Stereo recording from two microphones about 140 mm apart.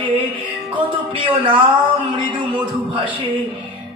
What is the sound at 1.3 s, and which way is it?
A man's voice, 35° right (ahead or behind).